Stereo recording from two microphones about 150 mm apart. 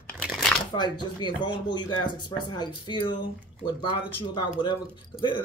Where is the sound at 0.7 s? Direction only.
30° left (ahead or behind).